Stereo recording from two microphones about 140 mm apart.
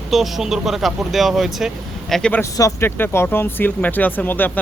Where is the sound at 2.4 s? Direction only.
20° left (ahead or behind).